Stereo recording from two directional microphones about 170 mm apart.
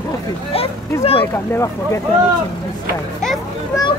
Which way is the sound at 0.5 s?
35° left (ahead or behind).